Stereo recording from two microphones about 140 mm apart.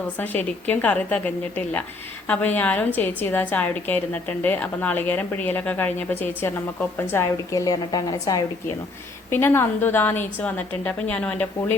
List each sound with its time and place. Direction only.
0.2 s a woman's voice: 10° left (ahead or behind)
9.3 s a woman's voice: 15° left (ahead or behind)